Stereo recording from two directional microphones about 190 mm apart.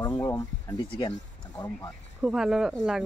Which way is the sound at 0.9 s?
25° left (ahead or behind).